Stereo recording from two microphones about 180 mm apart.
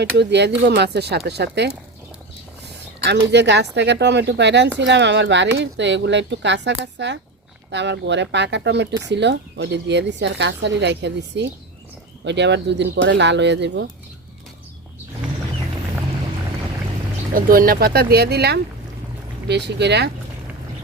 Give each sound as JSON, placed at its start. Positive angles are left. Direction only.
{"t": 0.0, "sound": "speech", "side_deg": -70}
{"t": 3.0, "sound": "speech", "side_deg": -70}
{"t": 17.3, "sound": "speech", "side_deg": -50}